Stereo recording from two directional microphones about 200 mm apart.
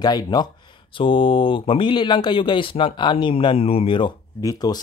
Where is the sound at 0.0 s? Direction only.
20° left (ahead or behind).